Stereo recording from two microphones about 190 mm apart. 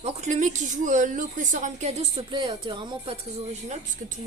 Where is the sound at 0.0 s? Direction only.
35° right (ahead or behind).